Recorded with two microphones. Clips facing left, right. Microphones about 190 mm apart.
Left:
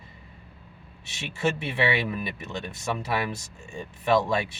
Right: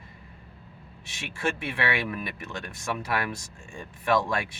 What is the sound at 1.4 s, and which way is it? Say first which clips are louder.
Speech: left 3 dB; 20° left (ahead or behind).